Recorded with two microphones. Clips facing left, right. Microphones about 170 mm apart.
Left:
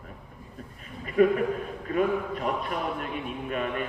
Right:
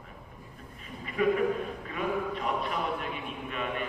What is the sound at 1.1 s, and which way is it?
A man's voice, 45° left (ahead or behind).